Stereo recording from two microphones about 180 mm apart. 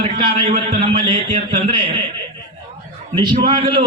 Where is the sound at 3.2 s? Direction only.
25° right (ahead or behind).